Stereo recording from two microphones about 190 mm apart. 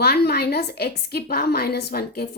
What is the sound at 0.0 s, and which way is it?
A woman's voice, 55° left (ahead or behind).